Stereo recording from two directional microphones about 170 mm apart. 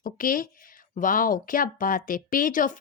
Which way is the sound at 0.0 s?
55° left (ahead or behind).